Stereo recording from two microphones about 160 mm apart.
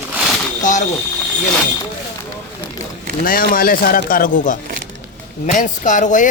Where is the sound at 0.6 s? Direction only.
50° left (ahead or behind).